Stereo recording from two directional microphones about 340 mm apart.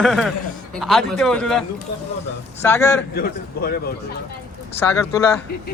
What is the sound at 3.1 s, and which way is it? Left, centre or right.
Speech, left.